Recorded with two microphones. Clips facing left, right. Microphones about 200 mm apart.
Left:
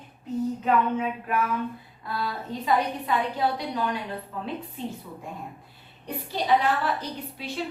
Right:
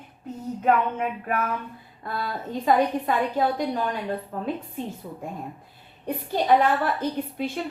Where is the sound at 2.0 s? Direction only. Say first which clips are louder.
Right 1 dB; 50° right (ahead or behind).